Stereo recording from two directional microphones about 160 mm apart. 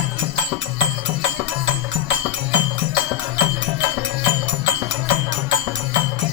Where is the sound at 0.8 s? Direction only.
10° right (ahead or behind).